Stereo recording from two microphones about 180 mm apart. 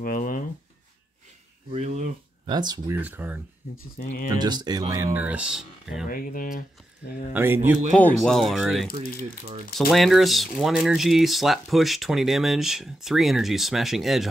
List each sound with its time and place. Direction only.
0.0 s speech: 50° left (ahead or behind)
1.7 s speech: 40° right (ahead or behind)
2.4 s speech: 25° right (ahead or behind)
3.0 s speech: 10° right (ahead or behind)
4.3 s speech: 25° right (ahead or behind); by 6.0 s 5° right (ahead or behind)
6.0 s speech: 50° left (ahead or behind)
7.3 s speech: 10° right (ahead or behind)
7.9 s speech: 5° left (ahead or behind)
9.0 s speech: 55° left (ahead or behind)
9.8 s speech: centre (ahead or behind)